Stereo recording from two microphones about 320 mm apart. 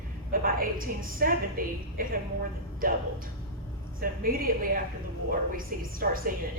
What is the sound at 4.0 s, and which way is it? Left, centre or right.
Speech, right.